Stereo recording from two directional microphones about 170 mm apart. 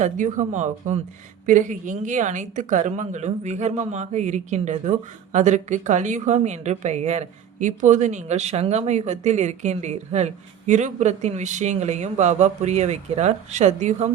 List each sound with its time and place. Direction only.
0.0 s a woman's voice: 50° right (ahead or behind)